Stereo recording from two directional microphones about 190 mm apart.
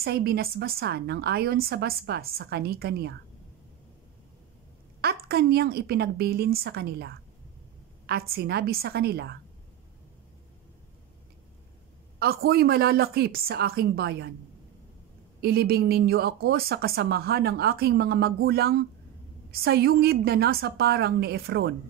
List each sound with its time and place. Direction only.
0.0 s speech: 55° right (ahead or behind)
5.0 s speech: 55° right (ahead or behind)
12.4 s speech: 55° right (ahead or behind)
15.4 s speech: 55° right (ahead or behind)